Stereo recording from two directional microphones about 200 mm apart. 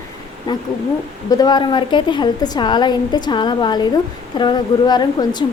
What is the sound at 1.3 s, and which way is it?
A woman's voice, 20° left (ahead or behind).